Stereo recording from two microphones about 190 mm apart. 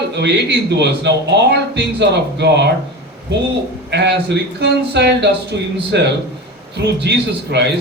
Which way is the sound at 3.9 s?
65° right (ahead or behind).